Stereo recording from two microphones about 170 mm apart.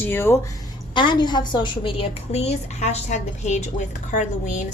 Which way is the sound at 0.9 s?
25° left (ahead or behind).